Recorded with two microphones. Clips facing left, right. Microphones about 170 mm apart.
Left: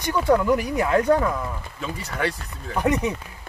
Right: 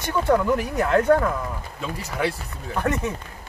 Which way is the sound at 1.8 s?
5° right (ahead or behind).